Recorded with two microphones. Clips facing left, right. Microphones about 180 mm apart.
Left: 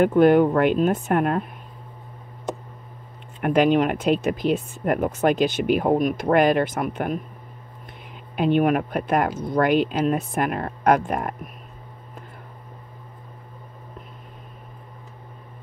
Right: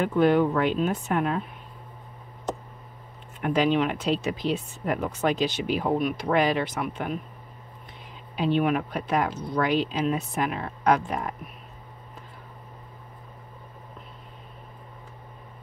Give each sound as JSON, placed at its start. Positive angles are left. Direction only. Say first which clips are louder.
{"t": 0.0, "sound": "speech", "louder": "left 5 dB", "side_deg": 50}
{"t": 3.4, "sound": "speech", "louder": "left 5 dB", "side_deg": 55}
{"t": 8.4, "sound": "speech", "louder": "left 4 dB", "side_deg": 55}